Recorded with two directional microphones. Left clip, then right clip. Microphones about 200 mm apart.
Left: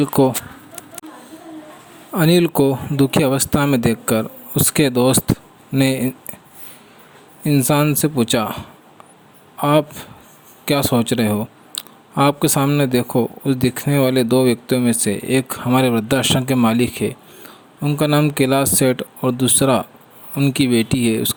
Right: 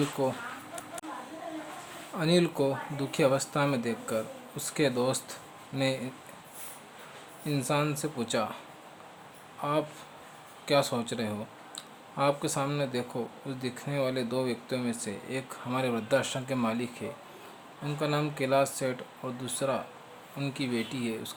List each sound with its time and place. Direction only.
0.0 s speech: 45° left (ahead or behind)
2.1 s speech: 40° left (ahead or behind)
7.4 s speech: 40° left (ahead or behind)